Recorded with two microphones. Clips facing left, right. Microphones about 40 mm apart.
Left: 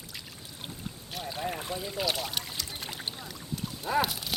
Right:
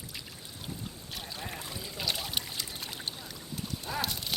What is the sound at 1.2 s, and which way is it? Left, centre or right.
Trickle, centre.